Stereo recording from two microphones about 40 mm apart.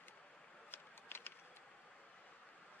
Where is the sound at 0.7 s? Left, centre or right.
Left.